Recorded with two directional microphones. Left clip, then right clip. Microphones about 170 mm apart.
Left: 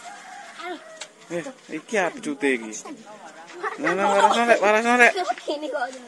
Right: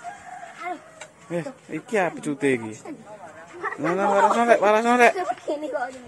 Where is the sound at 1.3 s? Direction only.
10° right (ahead or behind).